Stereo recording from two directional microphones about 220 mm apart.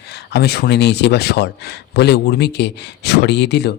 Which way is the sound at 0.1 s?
50° left (ahead or behind).